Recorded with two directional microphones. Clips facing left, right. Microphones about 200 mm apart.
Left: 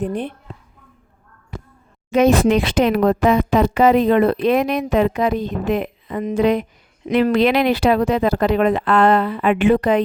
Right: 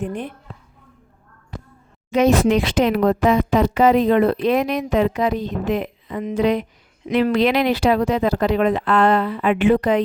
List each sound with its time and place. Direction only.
0.0 s a woman's voice: 35° left (ahead or behind)
2.0 s speech: 55° left (ahead or behind)